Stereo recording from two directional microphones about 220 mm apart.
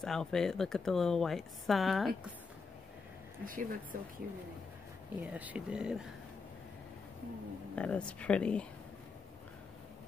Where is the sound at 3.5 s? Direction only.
40° right (ahead or behind).